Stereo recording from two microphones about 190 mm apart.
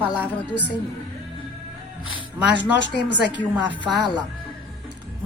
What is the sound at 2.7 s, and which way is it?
Speech, 65° left (ahead or behind).